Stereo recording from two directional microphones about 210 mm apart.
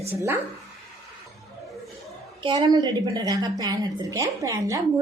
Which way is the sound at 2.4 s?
20° right (ahead or behind).